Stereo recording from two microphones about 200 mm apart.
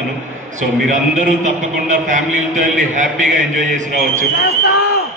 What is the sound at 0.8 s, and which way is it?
Mantra, 40° right (ahead or behind).